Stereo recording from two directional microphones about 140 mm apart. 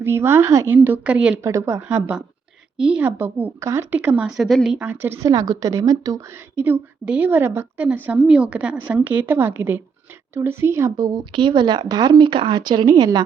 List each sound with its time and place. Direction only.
0.0 s a woman's voice: 15° right (ahead or behind)
1.4 s a woman's voice: 20° right (ahead or behind)
2.7 s a woman's voice: 5° right (ahead or behind)
4.4 s a woman's voice: centre (ahead or behind)
5.2 s a woman's voice: 25° right (ahead or behind)